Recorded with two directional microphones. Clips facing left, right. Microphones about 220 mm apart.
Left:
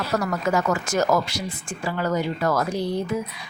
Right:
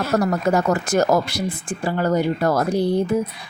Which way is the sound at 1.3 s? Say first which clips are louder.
Right 6 dB; 55° right (ahead or behind).